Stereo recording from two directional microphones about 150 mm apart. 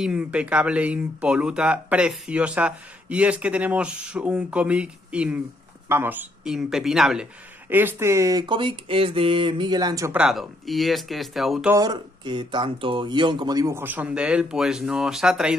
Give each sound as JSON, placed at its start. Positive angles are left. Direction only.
{"t": 0.0, "sound": "speech", "side_deg": -5}
{"t": 7.7, "sound": "speech", "side_deg": -15}
{"t": 10.1, "sound": "speech", "side_deg": 0}
{"t": 11.7, "sound": "speech", "side_deg": -25}